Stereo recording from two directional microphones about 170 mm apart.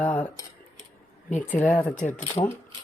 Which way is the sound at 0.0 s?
10° left (ahead or behind).